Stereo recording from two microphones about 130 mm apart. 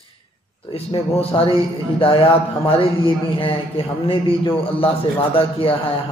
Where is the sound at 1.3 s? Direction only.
35° left (ahead or behind).